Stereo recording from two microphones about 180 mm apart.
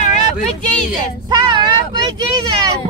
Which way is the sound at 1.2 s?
25° right (ahead or behind).